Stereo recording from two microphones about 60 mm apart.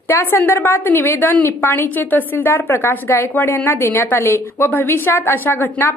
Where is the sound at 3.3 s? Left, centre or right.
Left.